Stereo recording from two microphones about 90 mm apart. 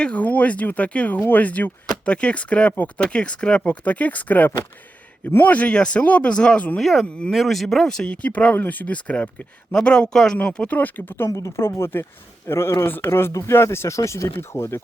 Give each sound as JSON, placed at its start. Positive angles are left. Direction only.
{"t": 0.0, "sound": "speech", "side_deg": 15}
{"t": 6.8, "sound": "speech", "side_deg": 0}
{"t": 7.1, "sound": "speech", "side_deg": 10}
{"t": 11.3, "sound": "speech", "side_deg": 40}